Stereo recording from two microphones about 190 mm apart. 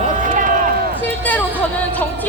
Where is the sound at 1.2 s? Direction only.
10° left (ahead or behind).